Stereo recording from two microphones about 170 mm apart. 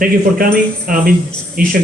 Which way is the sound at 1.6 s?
60° right (ahead or behind).